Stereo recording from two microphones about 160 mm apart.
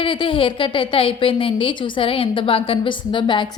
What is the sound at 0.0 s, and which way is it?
A woman's voice, 30° left (ahead or behind).